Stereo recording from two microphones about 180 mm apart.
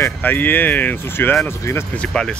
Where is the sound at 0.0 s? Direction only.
10° left (ahead or behind).